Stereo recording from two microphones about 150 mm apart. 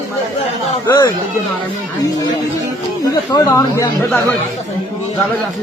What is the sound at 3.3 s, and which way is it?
Speech, 20° left (ahead or behind).